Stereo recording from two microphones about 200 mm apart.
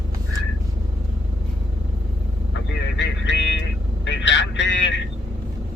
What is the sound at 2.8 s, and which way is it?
A man's voice, 65° left (ahead or behind).